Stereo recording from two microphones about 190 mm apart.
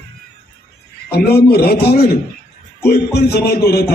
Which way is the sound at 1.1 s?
55° left (ahead or behind).